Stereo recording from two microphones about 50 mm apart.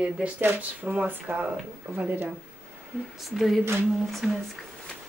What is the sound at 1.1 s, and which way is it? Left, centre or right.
Speech, right.